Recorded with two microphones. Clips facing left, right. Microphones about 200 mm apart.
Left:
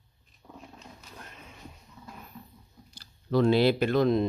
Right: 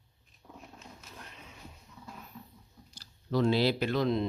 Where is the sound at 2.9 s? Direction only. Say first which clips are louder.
Left 5 dB; 60° left (ahead or behind).